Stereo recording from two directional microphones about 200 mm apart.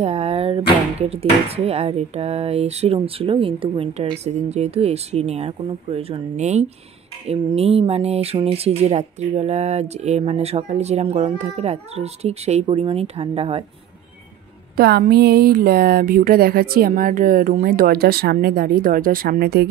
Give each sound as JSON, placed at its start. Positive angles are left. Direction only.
{"t": 0.0, "sound": "a sound", "side_deg": -30}
{"t": 1.1, "sound": "speech", "side_deg": -30}
{"t": 14.8, "sound": "speech", "side_deg": -50}